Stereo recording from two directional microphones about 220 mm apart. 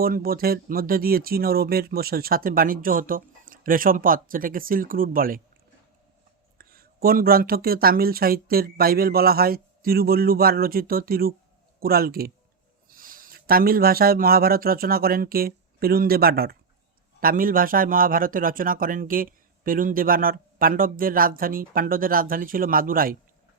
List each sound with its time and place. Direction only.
0.0 s speech: 40° right (ahead or behind)
6.6 s speech: 40° right (ahead or behind)